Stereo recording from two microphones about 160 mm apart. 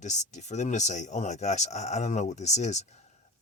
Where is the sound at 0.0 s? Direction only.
45° left (ahead or behind).